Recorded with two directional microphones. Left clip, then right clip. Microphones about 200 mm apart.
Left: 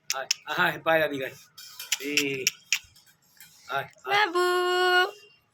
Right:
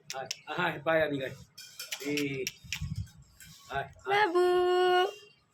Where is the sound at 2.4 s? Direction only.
20° right (ahead or behind).